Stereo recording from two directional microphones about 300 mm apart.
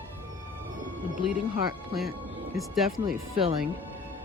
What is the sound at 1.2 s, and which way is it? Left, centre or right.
Speech, centre.